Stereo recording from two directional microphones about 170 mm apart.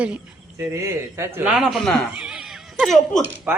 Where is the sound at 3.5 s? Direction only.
10° right (ahead or behind).